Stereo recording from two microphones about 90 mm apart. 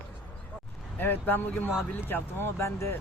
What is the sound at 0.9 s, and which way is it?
Speech, 20° left (ahead or behind).